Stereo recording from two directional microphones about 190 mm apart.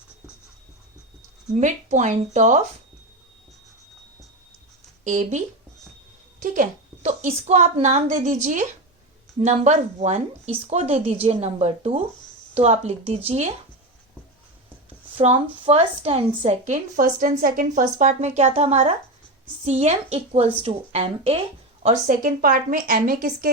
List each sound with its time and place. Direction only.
1.6 s a woman's voice: 40° right (ahead or behind)
5.0 s a woman's voice: 40° right (ahead or behind)
6.4 s a woman's voice: 45° right (ahead or behind)
15.5 s a woman's voice: 30° right (ahead or behind)
22.0 s a woman's voice: 45° right (ahead or behind)